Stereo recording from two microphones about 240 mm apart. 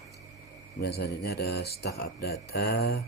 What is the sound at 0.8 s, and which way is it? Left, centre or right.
Speech, left.